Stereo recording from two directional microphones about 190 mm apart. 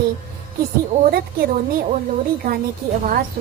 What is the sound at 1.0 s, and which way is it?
Speech, 50° right (ahead or behind).